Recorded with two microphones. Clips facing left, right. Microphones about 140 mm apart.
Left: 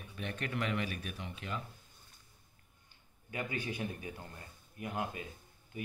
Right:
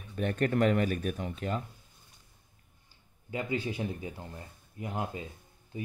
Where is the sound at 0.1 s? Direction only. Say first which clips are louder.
Right 11 dB; 45° right (ahead or behind).